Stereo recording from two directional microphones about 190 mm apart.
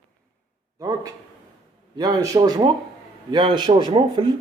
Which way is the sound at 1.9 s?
20° right (ahead or behind).